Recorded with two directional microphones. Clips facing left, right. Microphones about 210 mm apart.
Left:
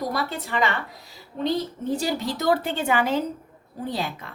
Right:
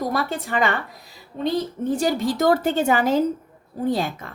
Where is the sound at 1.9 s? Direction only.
50° right (ahead or behind).